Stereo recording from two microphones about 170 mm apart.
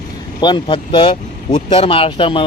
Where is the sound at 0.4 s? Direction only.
30° left (ahead or behind).